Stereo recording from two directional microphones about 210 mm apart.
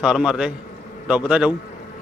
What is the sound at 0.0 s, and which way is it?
Speech, 5° right (ahead or behind).